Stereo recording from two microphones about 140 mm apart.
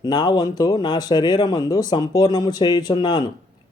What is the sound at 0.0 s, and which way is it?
Speech, 30° left (ahead or behind).